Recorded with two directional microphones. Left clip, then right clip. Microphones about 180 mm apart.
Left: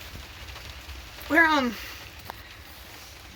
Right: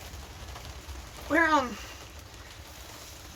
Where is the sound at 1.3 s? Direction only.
25° left (ahead or behind).